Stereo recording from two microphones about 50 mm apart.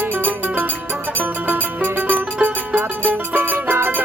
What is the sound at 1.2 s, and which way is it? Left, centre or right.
Music, right.